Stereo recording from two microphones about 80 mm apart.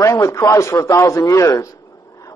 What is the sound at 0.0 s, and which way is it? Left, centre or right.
A man's voice, left.